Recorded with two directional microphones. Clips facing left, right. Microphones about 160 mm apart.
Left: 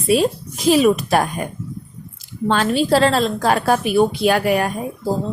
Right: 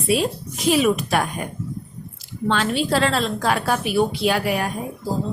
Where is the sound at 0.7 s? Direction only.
40° left (ahead or behind).